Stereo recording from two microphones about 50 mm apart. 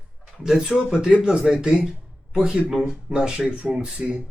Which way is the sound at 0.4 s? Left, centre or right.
Centre.